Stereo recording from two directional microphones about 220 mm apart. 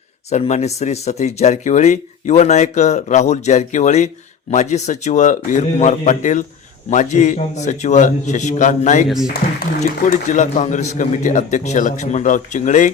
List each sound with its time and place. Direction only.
0.3 s speech: 30° left (ahead or behind)